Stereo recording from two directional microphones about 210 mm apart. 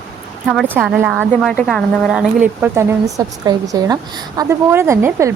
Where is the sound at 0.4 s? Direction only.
Centre (ahead or behind).